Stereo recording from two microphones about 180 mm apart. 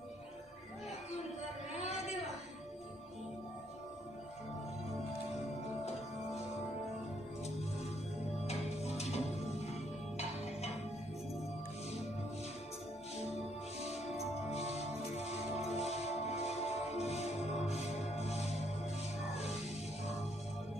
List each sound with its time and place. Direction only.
1.7 s a sound: 35° left (ahead or behind)
8.5 s music: 35° left (ahead or behind)
13.7 s music: 35° left (ahead or behind)